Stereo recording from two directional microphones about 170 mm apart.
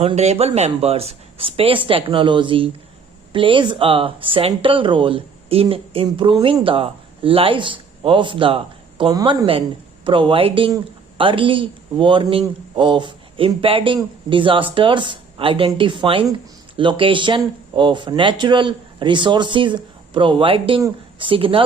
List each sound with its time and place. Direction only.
0.0 s a man's voice: 35° right (ahead or behind)